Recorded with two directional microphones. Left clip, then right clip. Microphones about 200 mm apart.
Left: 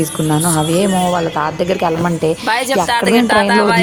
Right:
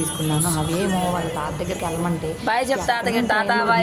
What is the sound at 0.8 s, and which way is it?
A woman's voice, 30° left (ahead or behind).